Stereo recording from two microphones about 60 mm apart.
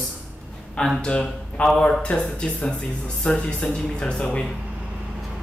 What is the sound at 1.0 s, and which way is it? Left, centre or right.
Speech, centre.